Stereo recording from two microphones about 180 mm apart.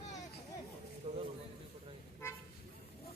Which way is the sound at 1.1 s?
35° right (ahead or behind).